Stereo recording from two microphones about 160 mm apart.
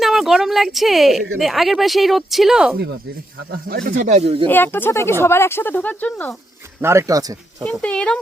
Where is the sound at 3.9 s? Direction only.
50° right (ahead or behind).